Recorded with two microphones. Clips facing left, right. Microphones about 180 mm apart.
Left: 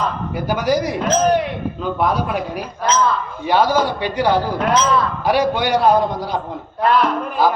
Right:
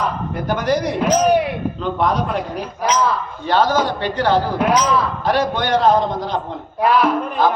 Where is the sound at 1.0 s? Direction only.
10° right (ahead or behind).